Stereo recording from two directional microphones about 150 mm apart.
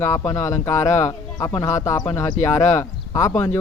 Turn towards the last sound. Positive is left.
turn(degrees=20)  # may be behind; listen again after turning